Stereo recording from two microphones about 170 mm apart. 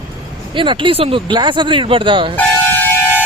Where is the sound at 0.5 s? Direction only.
30° right (ahead or behind).